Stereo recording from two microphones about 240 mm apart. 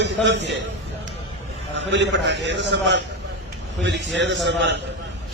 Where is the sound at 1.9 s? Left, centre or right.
Right.